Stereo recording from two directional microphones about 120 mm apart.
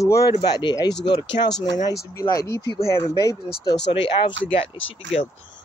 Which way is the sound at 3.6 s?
40° left (ahead or behind).